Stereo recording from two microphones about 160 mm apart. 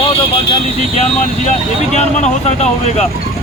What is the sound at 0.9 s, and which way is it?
Speech, 40° left (ahead or behind).